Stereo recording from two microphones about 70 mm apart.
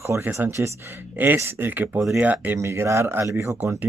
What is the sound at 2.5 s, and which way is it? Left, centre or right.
Speech, right.